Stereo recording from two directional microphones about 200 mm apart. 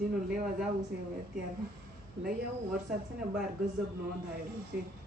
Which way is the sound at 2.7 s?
5° right (ahead or behind).